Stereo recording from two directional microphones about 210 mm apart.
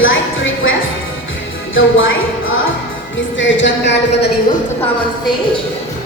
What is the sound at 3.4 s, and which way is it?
Speech, 65° left (ahead or behind).